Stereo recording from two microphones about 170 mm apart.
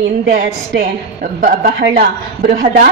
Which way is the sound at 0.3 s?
55° right (ahead or behind).